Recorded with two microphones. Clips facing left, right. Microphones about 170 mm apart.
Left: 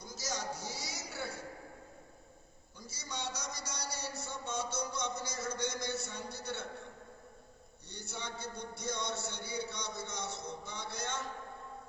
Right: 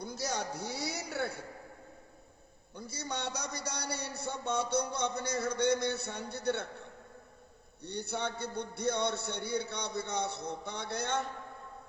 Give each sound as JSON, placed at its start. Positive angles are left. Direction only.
{"t": 0.0, "sound": "a sound", "side_deg": -60}
{"t": 2.7, "sound": "a man's voice", "side_deg": -60}
{"t": 7.9, "sound": "a man's voice", "side_deg": -60}